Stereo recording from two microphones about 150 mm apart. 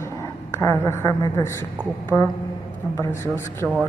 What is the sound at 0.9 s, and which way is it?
Speech, 20° left (ahead or behind).